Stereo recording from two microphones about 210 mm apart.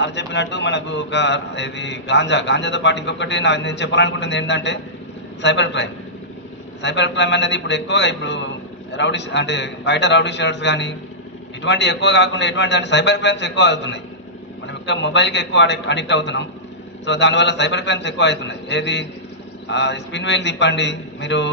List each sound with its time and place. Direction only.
0.0 s speech: 55° left (ahead or behind)